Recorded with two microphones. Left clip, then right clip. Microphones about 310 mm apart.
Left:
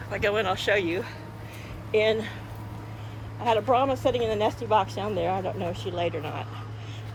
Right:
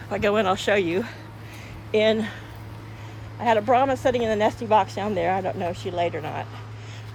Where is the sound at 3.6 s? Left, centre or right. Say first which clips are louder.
Right 3 dB; right.